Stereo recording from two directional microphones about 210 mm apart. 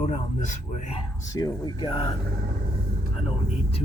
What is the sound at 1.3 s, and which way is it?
Speech, 20° left (ahead or behind).